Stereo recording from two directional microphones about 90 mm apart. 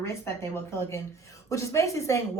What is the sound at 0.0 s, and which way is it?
Speech, 30° left (ahead or behind).